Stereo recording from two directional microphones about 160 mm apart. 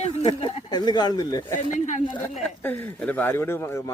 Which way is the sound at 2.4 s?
10° left (ahead or behind).